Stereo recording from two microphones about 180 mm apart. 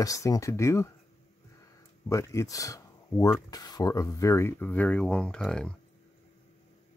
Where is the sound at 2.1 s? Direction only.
15° left (ahead or behind).